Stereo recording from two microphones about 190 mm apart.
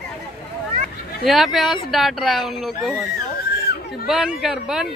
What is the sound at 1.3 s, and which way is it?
Speech, centre (ahead or behind).